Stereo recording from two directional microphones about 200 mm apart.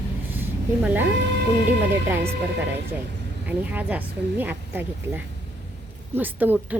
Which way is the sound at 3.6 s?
10° right (ahead or behind).